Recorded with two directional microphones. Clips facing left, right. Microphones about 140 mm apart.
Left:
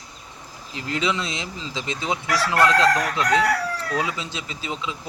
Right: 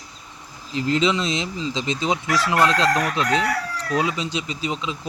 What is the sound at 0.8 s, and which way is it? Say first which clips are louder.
Fowl: right 5 dB; 25° right (ahead or behind).